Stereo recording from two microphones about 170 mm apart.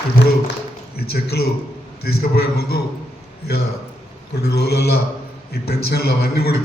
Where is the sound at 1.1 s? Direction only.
70° left (ahead or behind).